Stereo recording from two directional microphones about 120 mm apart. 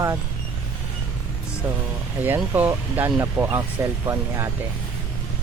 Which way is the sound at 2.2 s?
15° right (ahead or behind).